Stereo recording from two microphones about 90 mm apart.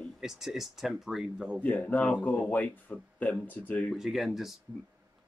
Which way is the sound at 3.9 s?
5° right (ahead or behind).